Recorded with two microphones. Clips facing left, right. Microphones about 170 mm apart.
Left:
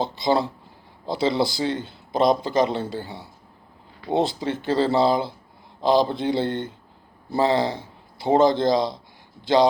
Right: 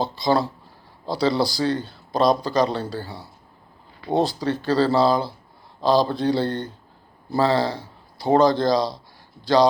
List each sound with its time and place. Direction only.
0.0 s speech: 20° left (ahead or behind)